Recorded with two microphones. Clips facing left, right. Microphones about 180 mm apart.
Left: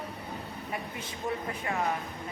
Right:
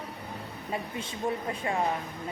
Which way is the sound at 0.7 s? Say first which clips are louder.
Right 5 dB; 25° right (ahead or behind).